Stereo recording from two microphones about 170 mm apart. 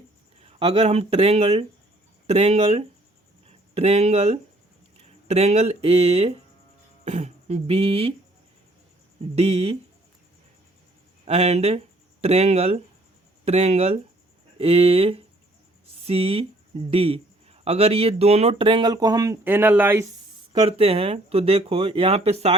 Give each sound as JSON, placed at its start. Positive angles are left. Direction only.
{"t": 0.3, "sound": "speech", "side_deg": -35}
{"t": 3.4, "sound": "a sound", "side_deg": -35}
{"t": 4.9, "sound": "speech", "side_deg": -35}
{"t": 9.3, "sound": "speech", "side_deg": -35}
{"t": 11.3, "sound": "speech", "side_deg": -40}
{"t": 20.5, "sound": "speech", "side_deg": -30}